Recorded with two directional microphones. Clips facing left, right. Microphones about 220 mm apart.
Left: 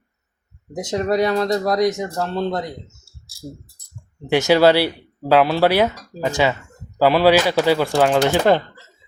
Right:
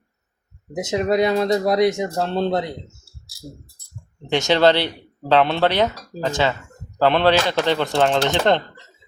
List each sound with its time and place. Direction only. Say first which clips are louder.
0.9 s speech: even; 15° right (ahead or behind)
2.1 s speech: right 2 dB; 30° right (ahead or behind)
4.3 s speech: left 2 dB; 10° left (ahead or behind)